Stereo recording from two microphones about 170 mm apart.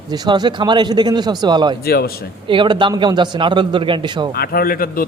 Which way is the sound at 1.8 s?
65° left (ahead or behind).